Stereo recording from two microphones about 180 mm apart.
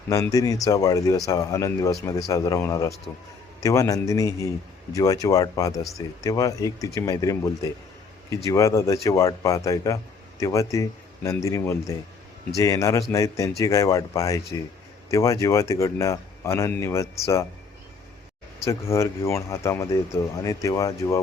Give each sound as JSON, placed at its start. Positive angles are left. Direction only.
{"t": 0.1, "sound": "speech", "side_deg": 20}
{"t": 18.6, "sound": "speech", "side_deg": 15}